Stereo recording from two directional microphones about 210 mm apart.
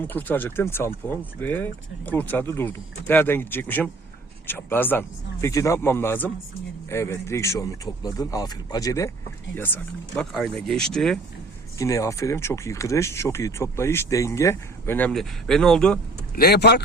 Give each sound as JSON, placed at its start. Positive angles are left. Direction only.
{"t": 0.0, "sound": "speech", "side_deg": 10}
{"t": 10.2, "sound": "speech", "side_deg": 0}
{"t": 11.8, "sound": "speech", "side_deg": 15}
{"t": 16.3, "sound": "a man's voice", "side_deg": 50}